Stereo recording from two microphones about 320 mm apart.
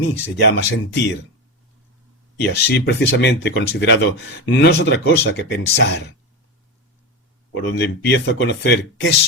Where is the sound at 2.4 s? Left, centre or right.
Left.